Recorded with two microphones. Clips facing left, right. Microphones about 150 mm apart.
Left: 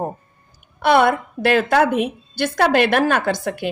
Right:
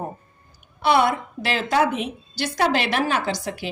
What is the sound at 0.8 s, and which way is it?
A woman's voice, 55° left (ahead or behind).